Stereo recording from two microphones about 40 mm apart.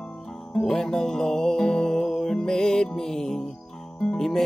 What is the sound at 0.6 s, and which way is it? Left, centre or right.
Music, centre.